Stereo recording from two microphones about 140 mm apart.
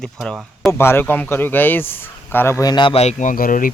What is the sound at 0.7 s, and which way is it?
Speech, 15° left (ahead or behind).